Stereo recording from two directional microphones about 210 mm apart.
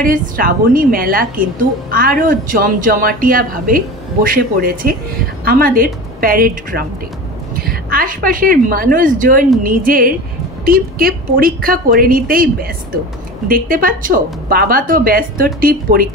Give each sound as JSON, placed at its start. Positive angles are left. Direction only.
{"t": 0.0, "sound": "a woman's voice", "side_deg": -40}
{"t": 13.5, "sound": "a woman's voice", "side_deg": -45}